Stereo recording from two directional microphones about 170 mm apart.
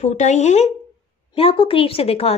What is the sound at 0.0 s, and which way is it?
Speech, 45° left (ahead or behind).